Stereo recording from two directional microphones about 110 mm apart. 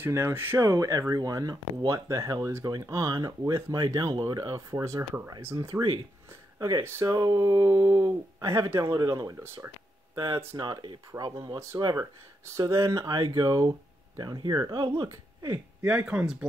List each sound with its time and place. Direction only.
0.0 s speech: 20° right (ahead or behind)
6.8 s speech: 20° right (ahead or behind)
7.1 s speech: 35° right (ahead or behind)
11.8 s speech: 30° right (ahead or behind)
15.0 s speech: 25° right (ahead or behind)